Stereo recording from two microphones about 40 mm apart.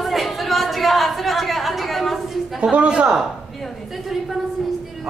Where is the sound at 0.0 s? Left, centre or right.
Centre.